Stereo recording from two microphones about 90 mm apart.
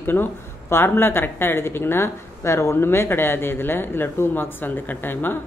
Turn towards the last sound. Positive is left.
turn(degrees=20)  # may be behind; listen again after turning